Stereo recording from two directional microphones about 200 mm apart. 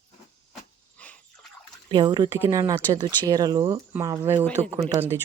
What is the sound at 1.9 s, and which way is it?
Speech, 20° right (ahead or behind).